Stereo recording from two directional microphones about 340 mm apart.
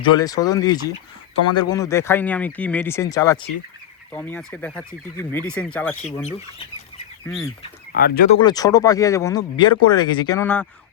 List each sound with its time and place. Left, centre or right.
0.0 s speech: centre
7.9 s speech: left
8.4 s speech: centre